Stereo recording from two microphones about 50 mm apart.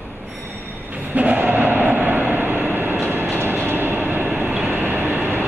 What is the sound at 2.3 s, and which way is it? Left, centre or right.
Train, right.